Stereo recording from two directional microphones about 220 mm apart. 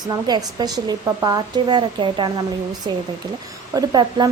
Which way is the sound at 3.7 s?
20° right (ahead or behind).